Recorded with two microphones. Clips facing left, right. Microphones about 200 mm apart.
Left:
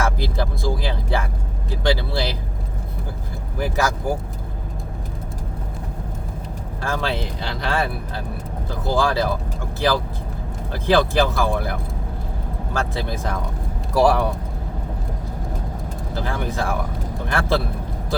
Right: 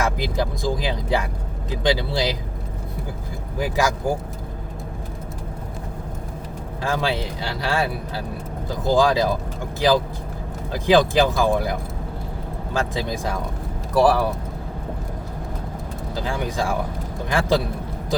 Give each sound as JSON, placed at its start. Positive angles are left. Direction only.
{"t": 0.0, "sound": "speech", "side_deg": -15}
{"t": 3.6, "sound": "speech", "side_deg": -15}
{"t": 6.8, "sound": "speech", "side_deg": -15}
{"t": 10.7, "sound": "speech", "side_deg": -15}
{"t": 13.9, "sound": "speech", "side_deg": 0}
{"t": 16.1, "sound": "speech", "side_deg": -15}